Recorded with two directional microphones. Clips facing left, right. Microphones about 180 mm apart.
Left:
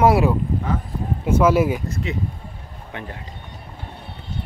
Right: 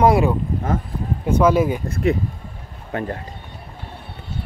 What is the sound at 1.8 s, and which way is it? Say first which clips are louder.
Speech: right 6 dB; 55° right (ahead or behind).